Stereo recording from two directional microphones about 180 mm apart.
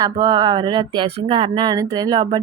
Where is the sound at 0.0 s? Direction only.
25° right (ahead or behind).